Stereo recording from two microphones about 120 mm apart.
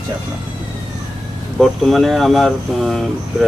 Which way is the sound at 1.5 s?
Centre (ahead or behind).